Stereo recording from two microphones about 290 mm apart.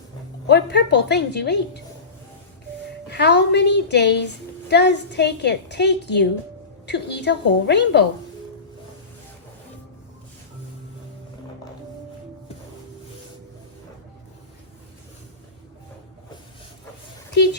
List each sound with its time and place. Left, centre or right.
0.4 s a woman's voice: left
3.1 s a woman's voice: left
17.3 s a sound: left